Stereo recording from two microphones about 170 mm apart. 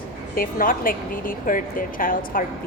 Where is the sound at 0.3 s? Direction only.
55° left (ahead or behind).